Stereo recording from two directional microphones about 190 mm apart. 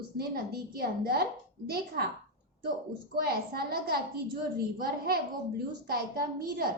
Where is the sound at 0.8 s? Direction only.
55° right (ahead or behind).